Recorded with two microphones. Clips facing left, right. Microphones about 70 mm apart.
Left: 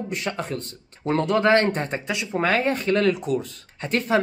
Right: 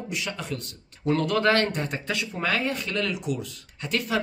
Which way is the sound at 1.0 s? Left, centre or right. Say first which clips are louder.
Left 3 dB; left.